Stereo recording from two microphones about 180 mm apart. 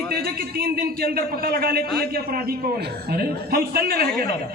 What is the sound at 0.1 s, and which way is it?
A man's voice, 60° right (ahead or behind).